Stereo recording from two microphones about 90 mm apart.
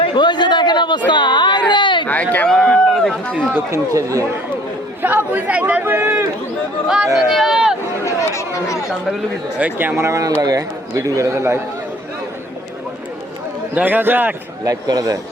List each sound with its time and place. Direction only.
0.0 s a sound: 60° left (ahead or behind)
2.0 s a sound: 15° left (ahead or behind)
2.9 s speech: 5° left (ahead or behind)
3.7 s a man's voice: 35° right (ahead or behind)
5.0 s a man's voice: 20° right (ahead or behind)
6.8 s speech: 10° right (ahead or behind)
8.0 s chatter: 35° left (ahead or behind)
8.5 s speech: 35° left (ahead or behind)
9.6 s a man's voice: 20° right (ahead or behind)
13.7 s a man's voice: 20° right (ahead or behind)
14.6 s speech: 45° right (ahead or behind)